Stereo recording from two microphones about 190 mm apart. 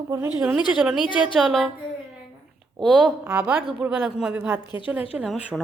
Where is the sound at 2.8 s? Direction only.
5° right (ahead or behind).